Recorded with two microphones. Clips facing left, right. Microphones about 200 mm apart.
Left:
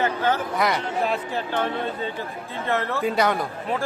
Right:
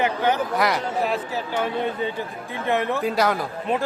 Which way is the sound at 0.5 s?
Centre (ahead or behind).